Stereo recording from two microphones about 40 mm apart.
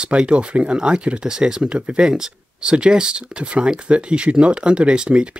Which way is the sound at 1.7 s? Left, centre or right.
Right.